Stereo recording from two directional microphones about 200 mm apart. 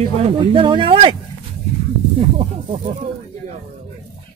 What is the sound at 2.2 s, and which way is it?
Speech, 30° right (ahead or behind).